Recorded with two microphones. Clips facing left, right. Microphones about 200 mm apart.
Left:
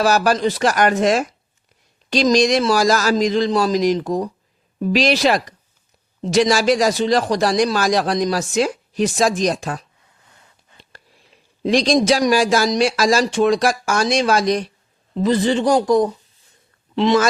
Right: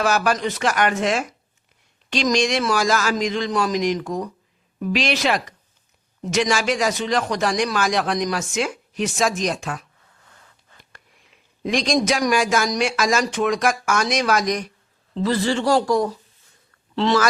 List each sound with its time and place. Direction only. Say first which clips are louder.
0.0 s a man's voice: left 4 dB; 35° left (ahead or behind)
10.8 s a sound: left 6 dB; 35° left (ahead or behind)
12.0 s a man's voice: left 4 dB; 30° left (ahead or behind)
15.1 s a man's voice: left 4 dB; 20° left (ahead or behind)